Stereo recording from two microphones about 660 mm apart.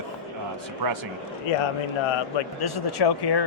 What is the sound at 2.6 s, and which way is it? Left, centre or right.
Speech, left.